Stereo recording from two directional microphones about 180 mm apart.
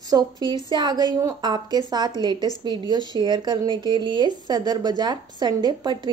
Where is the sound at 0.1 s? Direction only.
25° right (ahead or behind).